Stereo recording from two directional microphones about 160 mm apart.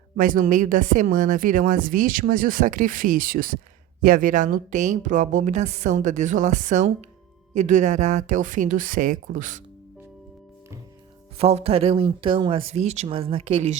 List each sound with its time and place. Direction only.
0.2 s a woman's voice: 55° right (ahead or behind)
11.3 s speech: 40° right (ahead or behind)